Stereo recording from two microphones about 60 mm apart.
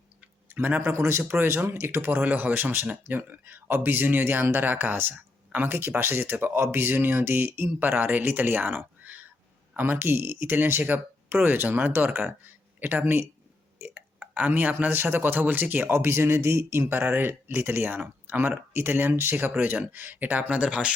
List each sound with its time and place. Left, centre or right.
0.4 s tick-tock: right
0.9 s speech: right
13.7 s a sound: right
14.3 s speech: right
20.7 s speech: centre